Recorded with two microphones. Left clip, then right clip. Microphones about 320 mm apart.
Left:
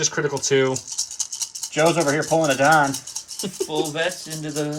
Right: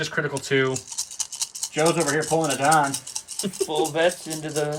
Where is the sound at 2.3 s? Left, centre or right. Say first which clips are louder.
Left 4 dB; centre.